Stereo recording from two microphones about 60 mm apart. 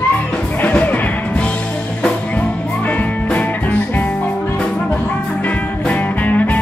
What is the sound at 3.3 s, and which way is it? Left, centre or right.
Music, left.